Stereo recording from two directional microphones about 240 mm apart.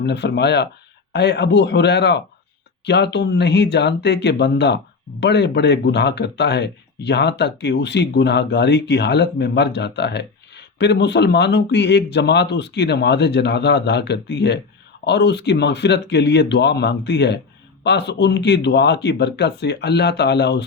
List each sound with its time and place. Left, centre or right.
0.0 s speech: left